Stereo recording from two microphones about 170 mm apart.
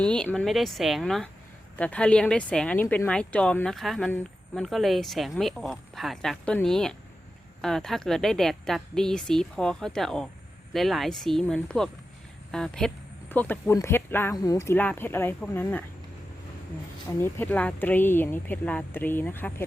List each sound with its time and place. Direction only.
0.0 s speech: 5° left (ahead or behind)
17.2 s speech: 15° left (ahead or behind)